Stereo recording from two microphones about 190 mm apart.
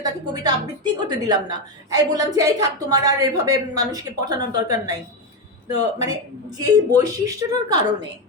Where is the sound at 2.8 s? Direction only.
15° right (ahead or behind).